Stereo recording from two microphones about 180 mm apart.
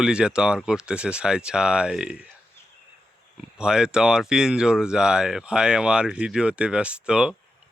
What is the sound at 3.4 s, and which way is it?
Speech, 5° right (ahead or behind).